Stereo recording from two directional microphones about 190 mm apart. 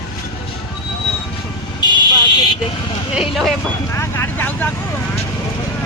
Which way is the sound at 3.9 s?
15° left (ahead or behind).